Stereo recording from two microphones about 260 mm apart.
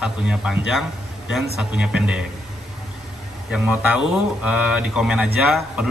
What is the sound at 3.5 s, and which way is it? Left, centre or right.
Speech, centre.